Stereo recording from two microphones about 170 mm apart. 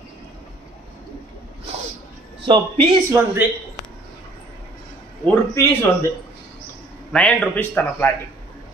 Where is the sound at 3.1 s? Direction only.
15° right (ahead or behind).